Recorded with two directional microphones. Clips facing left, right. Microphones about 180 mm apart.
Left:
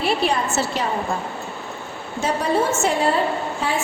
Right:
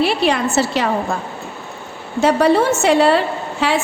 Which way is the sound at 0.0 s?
85° right.